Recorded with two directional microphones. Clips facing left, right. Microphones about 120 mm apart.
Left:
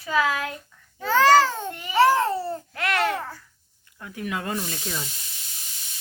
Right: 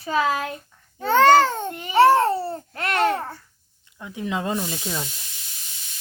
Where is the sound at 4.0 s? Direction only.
20° right (ahead or behind).